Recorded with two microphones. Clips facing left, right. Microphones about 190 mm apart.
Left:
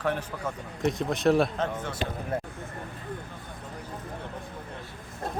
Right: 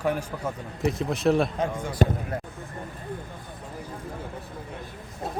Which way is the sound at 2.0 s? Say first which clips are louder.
Right 12 dB; 45° right (ahead or behind).